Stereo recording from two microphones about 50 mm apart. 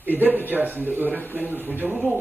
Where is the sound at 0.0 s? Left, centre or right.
Right.